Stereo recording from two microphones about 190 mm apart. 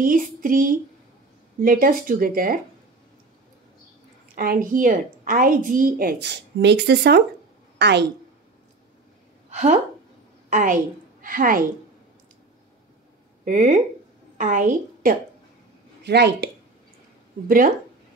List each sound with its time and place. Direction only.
0.0 s a woman's voice: 45° right (ahead or behind)
4.4 s a woman's voice: 45° right (ahead or behind); by 8.1 s 65° right (ahead or behind)
9.5 s a woman's voice: 40° right (ahead or behind)
13.5 s a woman's voice: 40° right (ahead or behind)
16.0 s speech: 60° right (ahead or behind)